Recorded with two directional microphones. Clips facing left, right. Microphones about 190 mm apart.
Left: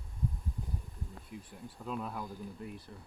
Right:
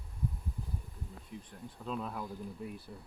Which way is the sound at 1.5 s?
5° left (ahead or behind).